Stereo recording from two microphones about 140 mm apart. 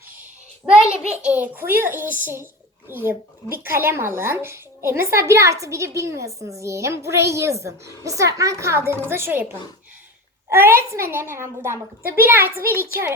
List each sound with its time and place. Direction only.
1.0 s a woman's voice: 5° right (ahead or behind)